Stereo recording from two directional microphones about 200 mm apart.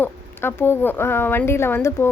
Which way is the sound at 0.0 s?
10° left (ahead or behind).